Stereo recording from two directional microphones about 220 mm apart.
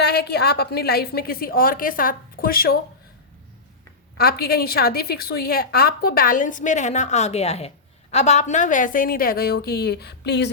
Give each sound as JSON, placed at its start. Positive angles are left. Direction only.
{"t": 0.0, "sound": "a woman's voice", "side_deg": 45}
{"t": 4.2, "sound": "a woman's voice", "side_deg": 45}